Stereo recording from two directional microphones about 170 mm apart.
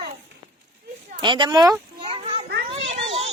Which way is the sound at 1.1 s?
30° right (ahead or behind).